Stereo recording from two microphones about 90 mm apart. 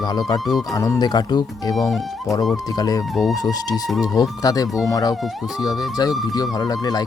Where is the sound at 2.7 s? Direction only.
45° left (ahead or behind).